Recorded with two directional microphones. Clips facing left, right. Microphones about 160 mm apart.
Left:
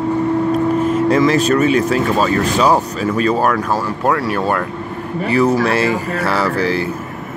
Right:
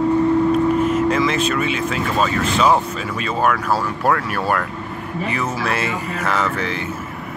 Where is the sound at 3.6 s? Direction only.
20° left (ahead or behind); by 6.9 s 35° left (ahead or behind).